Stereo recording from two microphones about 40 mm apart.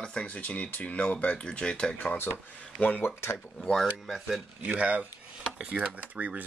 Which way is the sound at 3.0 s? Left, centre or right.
Left.